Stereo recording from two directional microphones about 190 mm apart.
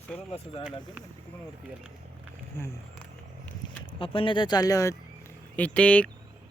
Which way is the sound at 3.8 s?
30° left (ahead or behind).